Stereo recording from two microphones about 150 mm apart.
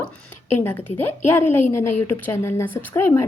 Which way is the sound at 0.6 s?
15° left (ahead or behind).